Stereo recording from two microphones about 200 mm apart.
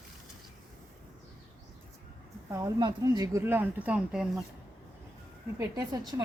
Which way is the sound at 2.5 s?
15° right (ahead or behind).